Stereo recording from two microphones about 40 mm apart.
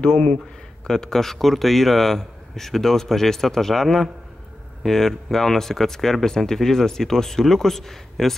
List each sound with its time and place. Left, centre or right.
0.0 s speech: left